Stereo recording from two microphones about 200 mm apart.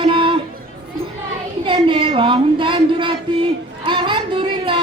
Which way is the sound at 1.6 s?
25° right (ahead or behind).